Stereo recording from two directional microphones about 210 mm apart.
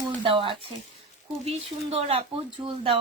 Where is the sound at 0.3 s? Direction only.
25° right (ahead or behind).